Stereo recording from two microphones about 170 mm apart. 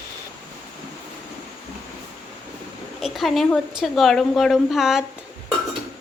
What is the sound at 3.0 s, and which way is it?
A woman's voice, centre (ahead or behind).